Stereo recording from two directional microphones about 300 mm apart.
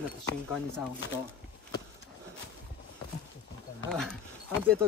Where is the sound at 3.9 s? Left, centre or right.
Centre.